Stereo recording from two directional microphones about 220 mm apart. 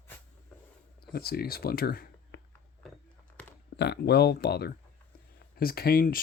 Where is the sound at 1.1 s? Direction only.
45° left (ahead or behind).